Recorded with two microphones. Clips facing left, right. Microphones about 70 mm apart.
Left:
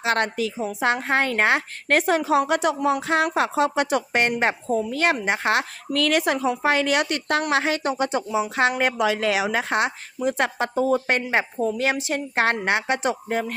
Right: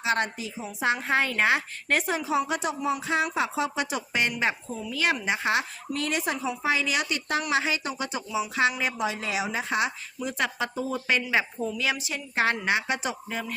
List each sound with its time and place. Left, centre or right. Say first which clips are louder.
0.0 s a woman's voice: left 5 dB; left
10.2 s speech: left 6 dB; left